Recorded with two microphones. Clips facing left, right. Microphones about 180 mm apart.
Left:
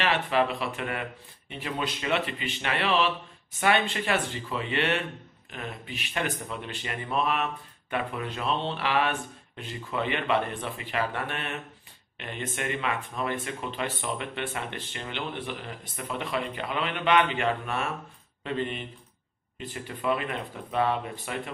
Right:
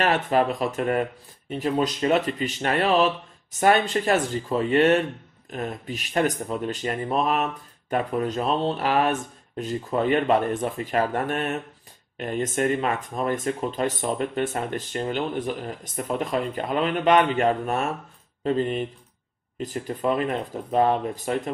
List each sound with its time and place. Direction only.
0.0 s speech: 45° right (ahead or behind)